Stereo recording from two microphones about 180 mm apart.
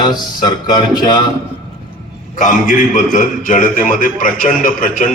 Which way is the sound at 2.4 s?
45° left (ahead or behind).